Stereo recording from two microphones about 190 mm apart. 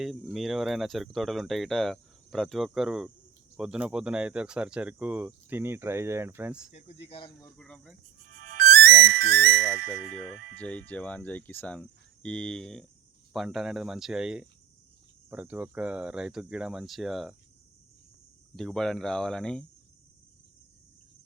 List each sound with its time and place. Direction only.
0.0 s speech: centre (ahead or behind)
3.6 s cricket: 5° right (ahead or behind)
6.7 s speech: 30° left (ahead or behind)
7.5 s speech: 5° left (ahead or behind)
8.6 s music: 55° right (ahead or behind)
10.2 s speech: 5° left (ahead or behind)
18.5 s speech: centre (ahead or behind)